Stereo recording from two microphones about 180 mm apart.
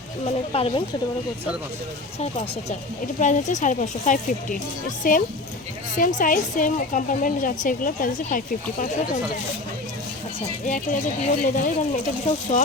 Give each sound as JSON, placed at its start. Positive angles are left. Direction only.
{"t": 0.3, "sound": "speech", "side_deg": 35}
{"t": 2.1, "sound": "a woman's voice", "side_deg": 35}
{"t": 11.4, "sound": "a woman's voice", "side_deg": 45}